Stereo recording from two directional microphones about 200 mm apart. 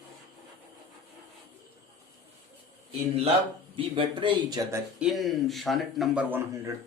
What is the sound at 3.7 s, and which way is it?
Speech, 25° right (ahead or behind).